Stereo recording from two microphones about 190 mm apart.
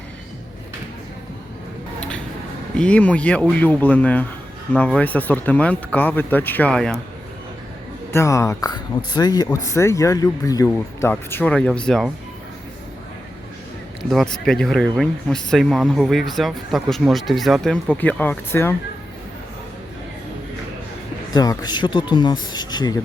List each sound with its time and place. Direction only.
2.0 s a sound: 5° left (ahead or behind)
2.7 s speech: 5° left (ahead or behind)
8.1 s speech: 15° left (ahead or behind)
14.1 s speech: centre (ahead or behind)
21.3 s speech: 20° left (ahead or behind)